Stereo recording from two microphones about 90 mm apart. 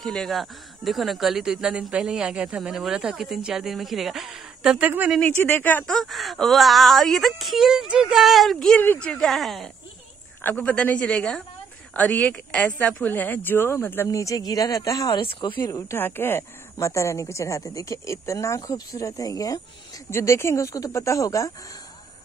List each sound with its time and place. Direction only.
0.0 s speech: 5° left (ahead or behind)
5.2 s speech: 20° left (ahead or behind)
5.9 s speech: centre (ahead or behind)
10.4 s a woman's voice: 15° left (ahead or behind)
14.0 s speech: 40° left (ahead or behind)
15.1 s speech: 60° left (ahead or behind)
15.6 s speech: 35° left (ahead or behind)
16.0 s speech: 25° left (ahead or behind); by 19.6 s 40° left (ahead or behind)
20.1 s speech: 30° left (ahead or behind)